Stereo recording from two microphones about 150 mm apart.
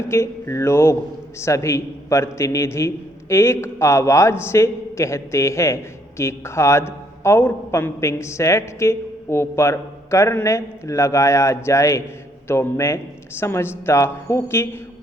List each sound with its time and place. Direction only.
0.0 s a woman's voice: 20° left (ahead or behind)